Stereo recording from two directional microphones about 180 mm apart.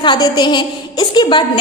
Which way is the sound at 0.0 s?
25° left (ahead or behind).